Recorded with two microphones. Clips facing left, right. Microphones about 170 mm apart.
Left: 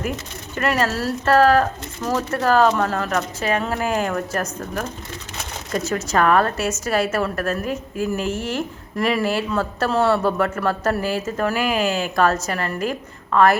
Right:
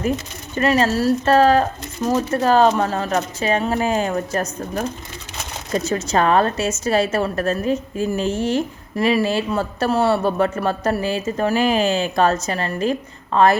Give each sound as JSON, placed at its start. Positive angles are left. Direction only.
{"t": 0.5, "sound": "speech", "side_deg": -20}